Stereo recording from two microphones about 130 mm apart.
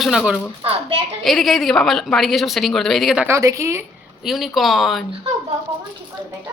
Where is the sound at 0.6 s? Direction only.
45° right (ahead or behind).